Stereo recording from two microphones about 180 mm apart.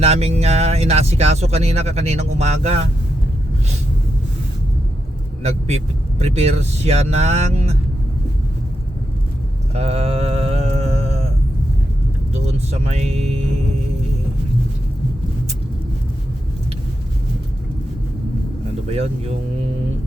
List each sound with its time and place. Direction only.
0.0 s speech: 35° right (ahead or behind)
5.4 s speech: 35° right (ahead or behind)
9.7 s mantra: 35° right (ahead or behind)
12.3 s vehicle: 35° right (ahead or behind)
18.9 s speech: 35° right (ahead or behind)